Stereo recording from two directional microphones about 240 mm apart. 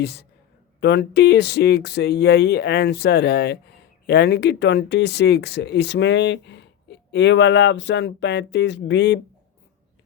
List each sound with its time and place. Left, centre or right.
0.0 s speech: left